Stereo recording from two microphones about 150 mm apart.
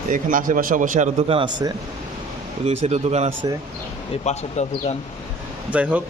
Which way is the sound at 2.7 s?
45° right (ahead or behind).